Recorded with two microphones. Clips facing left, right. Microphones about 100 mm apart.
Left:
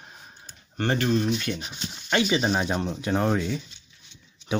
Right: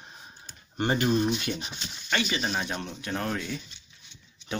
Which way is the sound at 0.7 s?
15° right (ahead or behind).